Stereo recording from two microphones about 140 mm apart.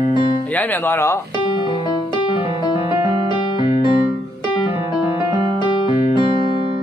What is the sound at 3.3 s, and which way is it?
Music, 35° left (ahead or behind).